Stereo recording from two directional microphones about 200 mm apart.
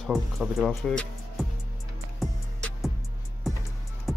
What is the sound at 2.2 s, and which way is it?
Music, centre (ahead or behind).